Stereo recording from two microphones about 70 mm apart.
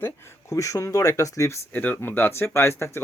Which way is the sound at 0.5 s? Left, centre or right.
Left.